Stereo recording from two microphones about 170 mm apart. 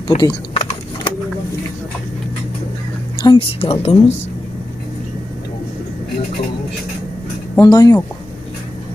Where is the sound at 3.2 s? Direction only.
30° left (ahead or behind).